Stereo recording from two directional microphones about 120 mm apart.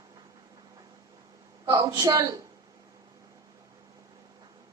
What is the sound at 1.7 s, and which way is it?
Speech, 30° right (ahead or behind).